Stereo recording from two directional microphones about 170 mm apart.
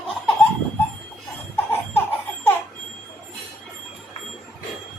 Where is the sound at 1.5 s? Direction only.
10° left (ahead or behind).